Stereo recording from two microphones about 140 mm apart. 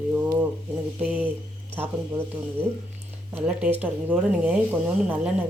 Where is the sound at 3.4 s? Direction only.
10° right (ahead or behind).